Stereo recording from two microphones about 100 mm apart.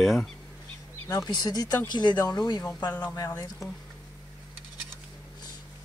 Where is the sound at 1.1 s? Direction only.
40° left (ahead or behind).